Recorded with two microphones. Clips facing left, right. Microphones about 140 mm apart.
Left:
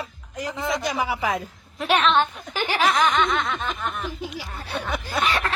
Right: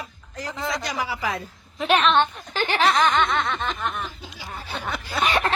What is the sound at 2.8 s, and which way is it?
Snicker, centre (ahead or behind).